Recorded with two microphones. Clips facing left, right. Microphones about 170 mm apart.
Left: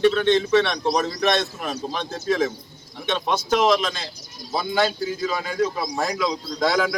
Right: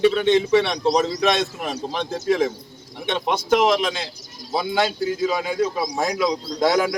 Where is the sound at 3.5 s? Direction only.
10° right (ahead or behind).